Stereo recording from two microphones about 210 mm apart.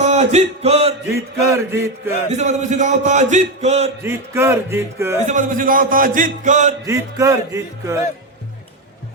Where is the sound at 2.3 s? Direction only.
35° right (ahead or behind).